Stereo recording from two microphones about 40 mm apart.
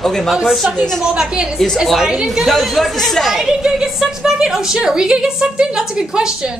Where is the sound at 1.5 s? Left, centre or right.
Centre.